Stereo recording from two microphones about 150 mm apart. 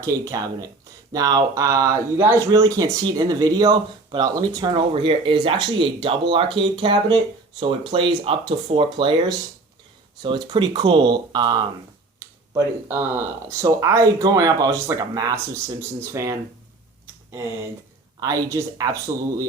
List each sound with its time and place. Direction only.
0.0 s speech: 20° right (ahead or behind)
10.2 s speech: 30° right (ahead or behind)
18.2 s speech: 20° right (ahead or behind)